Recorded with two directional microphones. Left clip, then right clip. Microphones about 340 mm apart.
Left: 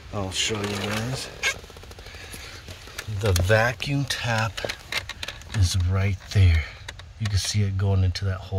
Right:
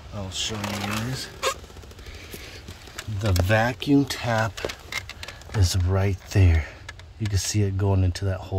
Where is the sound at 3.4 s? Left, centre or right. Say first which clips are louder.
Left 1 dB; centre.